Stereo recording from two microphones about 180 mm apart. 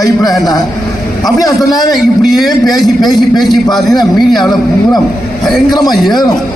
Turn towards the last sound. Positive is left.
turn(degrees=0)  # may be behind; listen again after turning